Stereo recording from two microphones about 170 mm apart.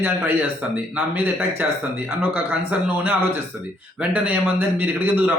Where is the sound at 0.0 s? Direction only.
10° right (ahead or behind).